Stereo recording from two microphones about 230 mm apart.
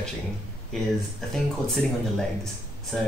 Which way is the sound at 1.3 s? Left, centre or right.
Centre.